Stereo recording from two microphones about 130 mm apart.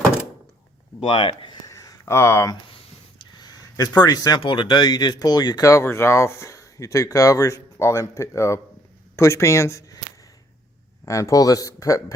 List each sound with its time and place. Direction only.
0.9 s speech: 40° left (ahead or behind)
1.6 s a sound: 25° left (ahead or behind)
4.4 s speech: 40° left (ahead or behind); by 10.0 s 25° left (ahead or behind)
11.0 s speech: 25° left (ahead or behind)